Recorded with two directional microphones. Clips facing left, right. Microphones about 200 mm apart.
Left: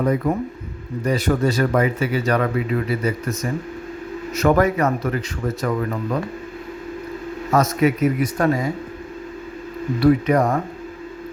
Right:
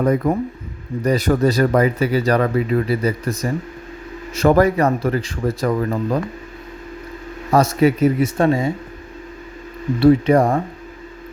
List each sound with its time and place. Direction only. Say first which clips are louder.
0.0 s speech: right 3 dB; 45° right (ahead or behind)
7.5 s speech: right 3 dB; 30° right (ahead or behind)
10.0 s speech: right 3 dB; 30° right (ahead or behind)